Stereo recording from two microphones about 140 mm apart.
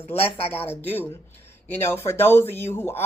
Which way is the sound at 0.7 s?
15° left (ahead or behind).